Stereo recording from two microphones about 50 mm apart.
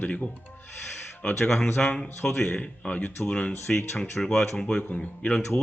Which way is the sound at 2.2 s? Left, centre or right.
Centre.